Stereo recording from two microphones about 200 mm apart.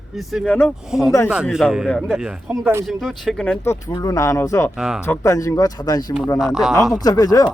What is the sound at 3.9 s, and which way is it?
Speech, 15° left (ahead or behind).